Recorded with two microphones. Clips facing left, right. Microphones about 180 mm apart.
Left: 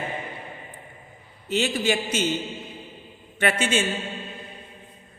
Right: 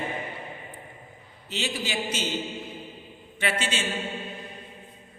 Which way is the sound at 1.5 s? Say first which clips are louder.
Left 8 dB; 50° left (ahead or behind).